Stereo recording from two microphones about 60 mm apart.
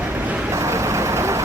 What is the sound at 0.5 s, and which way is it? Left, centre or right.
Vehicle, right.